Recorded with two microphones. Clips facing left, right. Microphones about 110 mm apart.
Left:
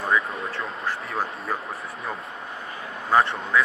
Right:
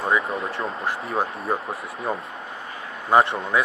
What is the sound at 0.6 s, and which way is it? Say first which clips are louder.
Speech: right 3 dB; 25° right (ahead or behind).